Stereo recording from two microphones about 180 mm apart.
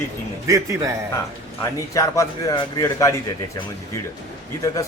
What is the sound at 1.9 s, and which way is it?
A man's voice, 20° left (ahead or behind).